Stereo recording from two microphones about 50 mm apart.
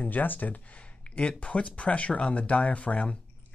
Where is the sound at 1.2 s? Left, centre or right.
Left.